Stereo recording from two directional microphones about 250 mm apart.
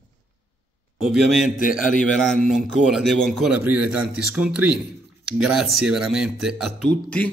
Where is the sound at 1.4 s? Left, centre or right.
Left.